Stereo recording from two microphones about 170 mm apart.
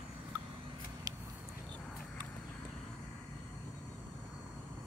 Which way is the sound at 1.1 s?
20° right (ahead or behind).